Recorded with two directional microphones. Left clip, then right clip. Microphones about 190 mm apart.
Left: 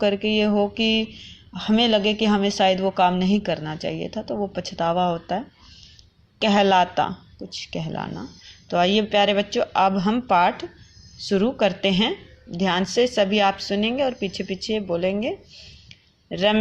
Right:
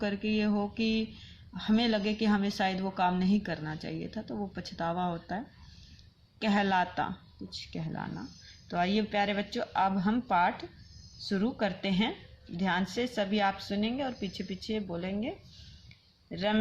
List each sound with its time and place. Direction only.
0.0 s speech: 20° left (ahead or behind)
6.4 s speech: 25° left (ahead or behind)